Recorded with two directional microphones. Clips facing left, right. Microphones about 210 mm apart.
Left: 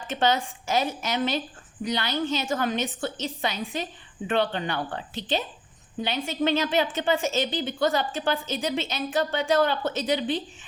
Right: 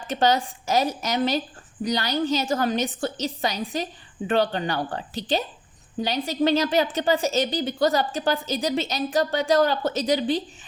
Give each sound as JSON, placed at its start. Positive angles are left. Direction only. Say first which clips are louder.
{"t": 0.1, "sound": "a woman's voice", "louder": "right 3 dB", "side_deg": -35}